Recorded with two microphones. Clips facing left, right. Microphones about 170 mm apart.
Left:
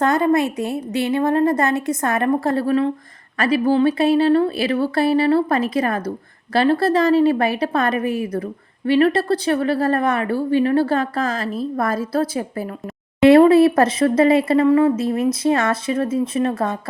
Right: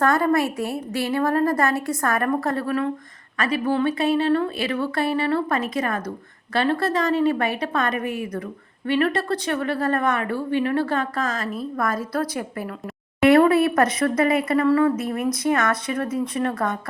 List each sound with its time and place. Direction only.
0.0 s speech: 20° left (ahead or behind)